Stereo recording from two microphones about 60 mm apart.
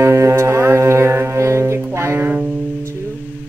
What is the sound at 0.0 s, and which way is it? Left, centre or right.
Music, right.